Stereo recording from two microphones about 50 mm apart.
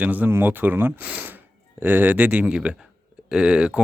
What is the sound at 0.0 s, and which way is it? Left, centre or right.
Speech, right.